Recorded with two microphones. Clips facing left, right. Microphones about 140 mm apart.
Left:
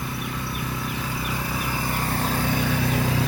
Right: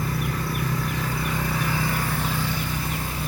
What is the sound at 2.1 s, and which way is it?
Vehicle, 40° left (ahead or behind).